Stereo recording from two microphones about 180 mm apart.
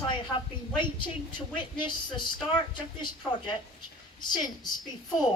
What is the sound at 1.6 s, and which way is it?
Speech, 25° left (ahead or behind).